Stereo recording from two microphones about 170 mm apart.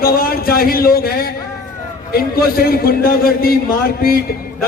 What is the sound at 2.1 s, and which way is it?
A man's voice, 60° left (ahead or behind).